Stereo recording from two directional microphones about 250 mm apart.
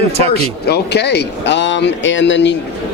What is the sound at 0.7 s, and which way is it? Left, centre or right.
Speech, left.